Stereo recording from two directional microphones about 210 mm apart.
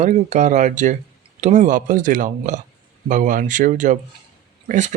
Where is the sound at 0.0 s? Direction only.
35° right (ahead or behind).